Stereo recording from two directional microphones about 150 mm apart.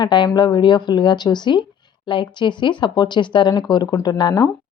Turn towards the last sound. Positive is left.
turn(degrees=25)  # may be behind; listen again after turning